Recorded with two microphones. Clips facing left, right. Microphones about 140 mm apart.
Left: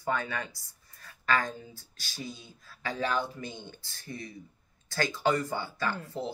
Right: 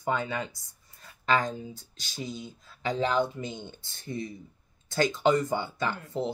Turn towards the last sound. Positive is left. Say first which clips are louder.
# right 3 dB
turn(degrees=-20)  # may be behind; listen again after turning